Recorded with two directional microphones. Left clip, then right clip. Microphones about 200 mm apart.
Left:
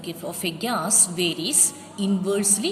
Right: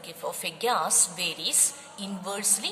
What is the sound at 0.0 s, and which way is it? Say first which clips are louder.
A woman's voice: left 4 dB; 25° right (ahead or behind).